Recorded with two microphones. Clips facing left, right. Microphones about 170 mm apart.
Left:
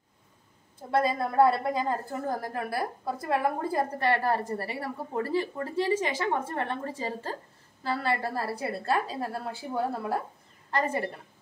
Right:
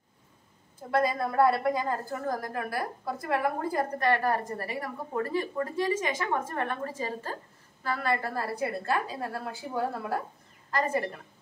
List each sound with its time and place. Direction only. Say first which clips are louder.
0.9 s a woman's voice: left 1 dB; 25° left (ahead or behind)
10.7 s a woman's voice: even; 30° left (ahead or behind)